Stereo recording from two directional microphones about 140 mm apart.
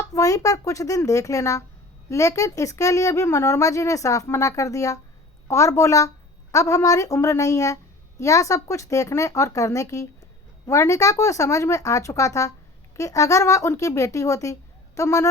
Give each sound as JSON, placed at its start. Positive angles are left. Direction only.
{"t": 0.1, "sound": "speech", "side_deg": 25}